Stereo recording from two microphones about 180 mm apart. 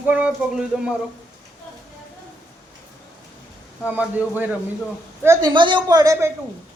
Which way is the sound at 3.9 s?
10° right (ahead or behind).